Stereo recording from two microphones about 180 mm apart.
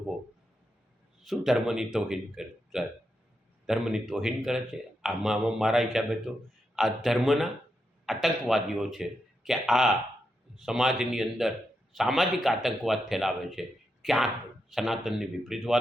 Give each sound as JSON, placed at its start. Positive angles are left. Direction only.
{"t": 1.2, "sound": "speech", "side_deg": 0}